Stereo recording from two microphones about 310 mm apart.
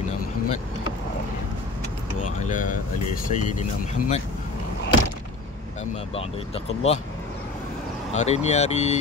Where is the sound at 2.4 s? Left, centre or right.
Left.